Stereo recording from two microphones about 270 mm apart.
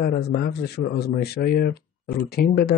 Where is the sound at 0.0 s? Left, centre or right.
Left.